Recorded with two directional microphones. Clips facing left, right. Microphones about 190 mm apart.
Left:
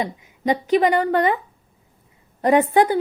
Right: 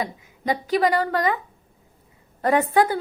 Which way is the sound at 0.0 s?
20° left (ahead or behind).